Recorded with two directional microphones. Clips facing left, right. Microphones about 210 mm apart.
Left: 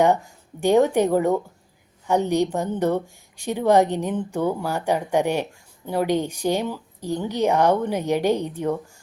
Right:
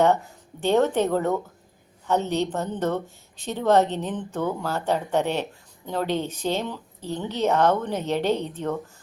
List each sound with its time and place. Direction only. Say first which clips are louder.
0.6 s a woman's voice: left 3 dB; 10° left (ahead or behind)